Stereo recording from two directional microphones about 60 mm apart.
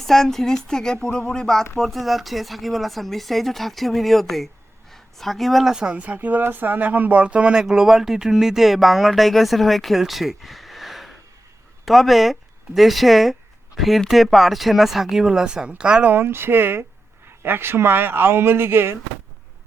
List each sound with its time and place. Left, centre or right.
0.0 s speech: centre
5.7 s speech: centre
16.0 s speech: right